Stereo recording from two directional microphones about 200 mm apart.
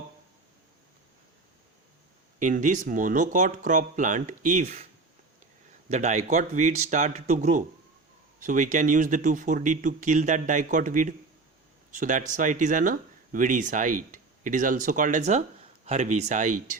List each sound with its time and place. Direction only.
2.4 s speech: 40° right (ahead or behind)
5.9 s speech: 35° right (ahead or behind)